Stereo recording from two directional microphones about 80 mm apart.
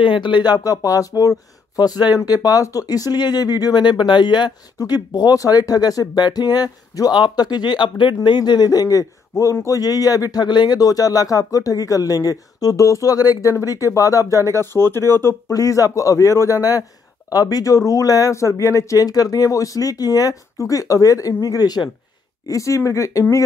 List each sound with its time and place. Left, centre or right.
0.0 s speech: left
1.8 s speech: left
4.7 s speech: left
14.3 s speech: right
14.6 s speech: left
15.5 s speech: left
22.5 s speech: left